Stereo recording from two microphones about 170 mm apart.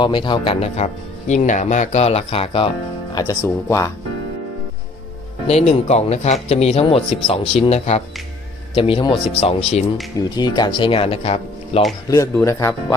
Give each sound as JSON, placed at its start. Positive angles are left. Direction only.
{"t": 0.0, "sound": "speech", "side_deg": 30}
{"t": 1.3, "sound": "speech", "side_deg": 45}
{"t": 3.2, "sound": "speech", "side_deg": 20}
{"t": 5.5, "sound": "speech", "side_deg": 35}
{"t": 10.2, "sound": "speech", "side_deg": 25}
{"t": 12.0, "sound": "speech", "side_deg": 20}